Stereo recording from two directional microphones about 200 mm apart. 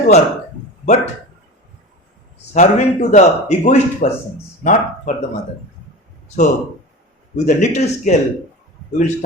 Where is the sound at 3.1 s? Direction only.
35° left (ahead or behind).